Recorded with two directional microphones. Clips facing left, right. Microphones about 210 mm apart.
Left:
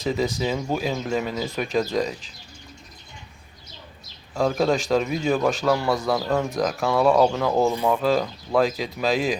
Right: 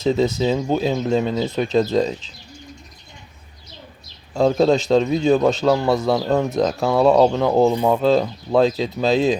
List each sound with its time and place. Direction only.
0.0 s a man's voice: 25° right (ahead or behind)
4.4 s a man's voice: 25° right (ahead or behind)